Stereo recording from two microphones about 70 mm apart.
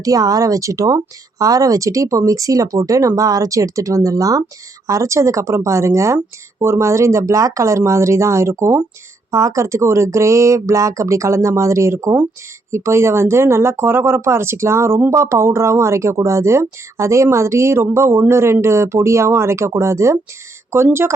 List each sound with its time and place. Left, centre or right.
0.0 s speech: right